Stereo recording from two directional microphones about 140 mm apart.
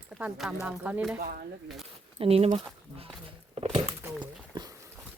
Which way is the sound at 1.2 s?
90° right.